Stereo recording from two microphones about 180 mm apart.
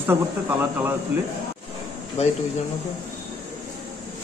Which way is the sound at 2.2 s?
35° left (ahead or behind).